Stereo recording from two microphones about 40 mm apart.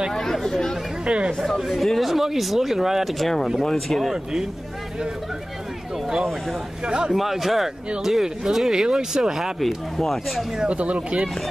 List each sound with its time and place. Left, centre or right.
0.1 s speech: centre
1.0 s speech: right
1.6 s speech: centre
4.1 s speech: centre
6.0 s speech: centre
6.9 s a man's voice: right
7.2 s speech: centre
9.9 s speech: centre
10.7 s speech: right